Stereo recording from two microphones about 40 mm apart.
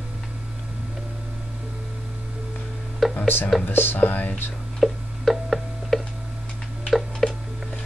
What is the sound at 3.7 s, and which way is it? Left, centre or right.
Speech, left.